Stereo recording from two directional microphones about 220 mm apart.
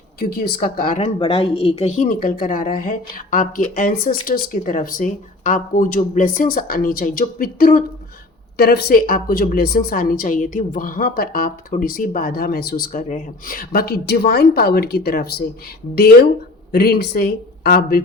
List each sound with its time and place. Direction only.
0.2 s a woman's voice: 45° left (ahead or behind)
16.7 s speech: 45° left (ahead or behind)